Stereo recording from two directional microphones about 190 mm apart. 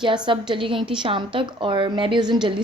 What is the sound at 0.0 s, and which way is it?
A woman's voice, 25° right (ahead or behind).